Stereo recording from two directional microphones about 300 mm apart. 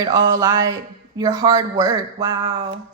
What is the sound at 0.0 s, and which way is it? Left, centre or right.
Speech, centre.